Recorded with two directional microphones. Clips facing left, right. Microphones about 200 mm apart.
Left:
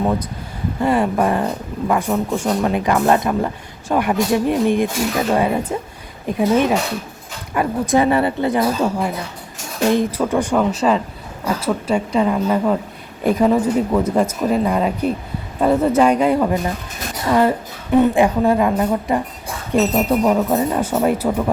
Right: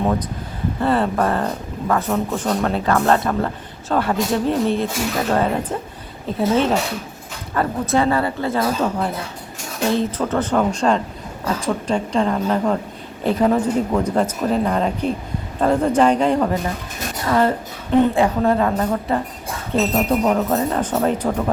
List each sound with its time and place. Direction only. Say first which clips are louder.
0.8 s speech: left 2 dB; 10° left (ahead or behind)